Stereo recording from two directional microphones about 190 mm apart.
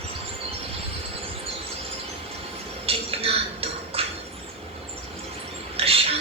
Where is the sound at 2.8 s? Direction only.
30° right (ahead or behind).